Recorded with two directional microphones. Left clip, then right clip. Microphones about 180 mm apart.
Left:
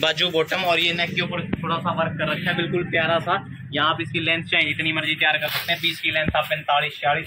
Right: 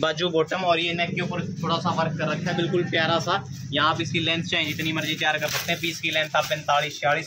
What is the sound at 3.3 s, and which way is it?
Speech, 40° right (ahead or behind).